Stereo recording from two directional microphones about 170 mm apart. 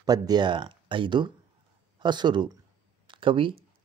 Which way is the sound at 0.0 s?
25° right (ahead or behind).